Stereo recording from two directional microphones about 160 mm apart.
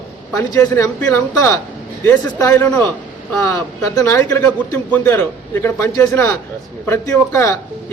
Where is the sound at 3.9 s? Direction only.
20° left (ahead or behind).